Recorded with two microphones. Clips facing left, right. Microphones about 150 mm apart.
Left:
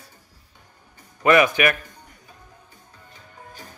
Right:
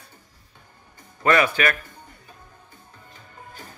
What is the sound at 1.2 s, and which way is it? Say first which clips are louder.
Speech: left 3 dB; 15° left (ahead or behind).